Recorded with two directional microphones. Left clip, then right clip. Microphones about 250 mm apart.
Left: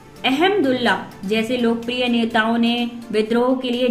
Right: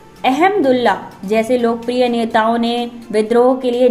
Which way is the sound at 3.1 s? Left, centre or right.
Centre.